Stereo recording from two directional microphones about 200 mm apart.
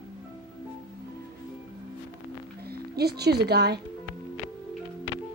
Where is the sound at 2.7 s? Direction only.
50° right (ahead or behind).